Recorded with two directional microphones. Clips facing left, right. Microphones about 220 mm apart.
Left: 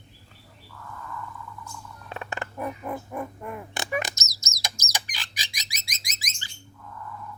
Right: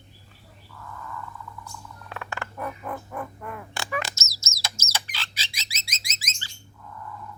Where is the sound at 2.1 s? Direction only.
20° left (ahead or behind).